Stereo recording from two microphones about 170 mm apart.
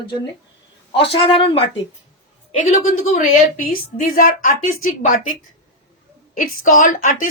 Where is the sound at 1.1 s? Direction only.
30° left (ahead or behind).